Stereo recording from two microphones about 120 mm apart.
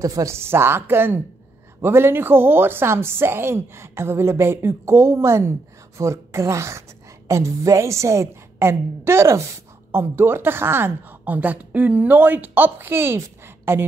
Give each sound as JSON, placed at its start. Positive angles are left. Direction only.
{"t": 0.0, "sound": "a woman's voice", "side_deg": -25}